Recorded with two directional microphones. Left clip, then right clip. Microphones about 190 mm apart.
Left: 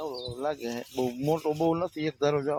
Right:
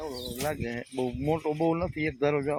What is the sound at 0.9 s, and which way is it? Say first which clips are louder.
Speech: left 1 dB; 25° left (ahead or behind).